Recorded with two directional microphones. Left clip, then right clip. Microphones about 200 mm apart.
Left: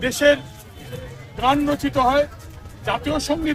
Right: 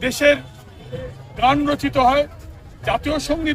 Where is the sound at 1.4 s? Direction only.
25° right (ahead or behind).